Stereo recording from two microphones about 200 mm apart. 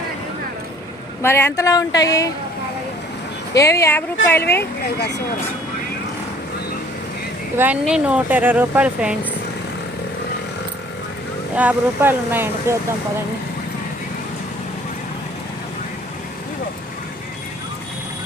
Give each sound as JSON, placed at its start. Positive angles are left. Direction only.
{"t": 1.2, "sound": "speech", "side_deg": 10}
{"t": 3.5, "sound": "speech", "side_deg": 15}
{"t": 7.5, "sound": "speech", "side_deg": -10}
{"t": 11.5, "sound": "speech", "side_deg": -5}